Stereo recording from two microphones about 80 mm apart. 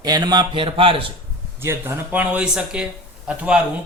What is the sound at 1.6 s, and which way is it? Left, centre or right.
Speech, right.